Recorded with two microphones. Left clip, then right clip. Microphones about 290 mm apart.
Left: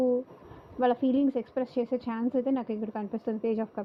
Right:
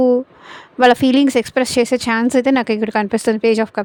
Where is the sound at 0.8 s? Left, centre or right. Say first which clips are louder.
Right 14 dB; right.